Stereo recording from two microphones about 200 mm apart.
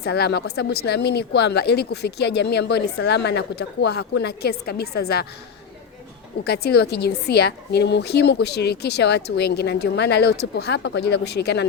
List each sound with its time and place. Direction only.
0.0 s speech: 55° left (ahead or behind)
6.4 s speech: 55° left (ahead or behind)